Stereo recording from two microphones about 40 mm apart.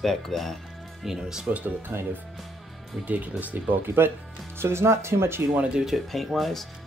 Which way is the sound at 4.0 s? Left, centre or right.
Right.